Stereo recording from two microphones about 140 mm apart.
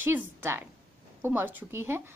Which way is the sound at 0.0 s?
15° right (ahead or behind).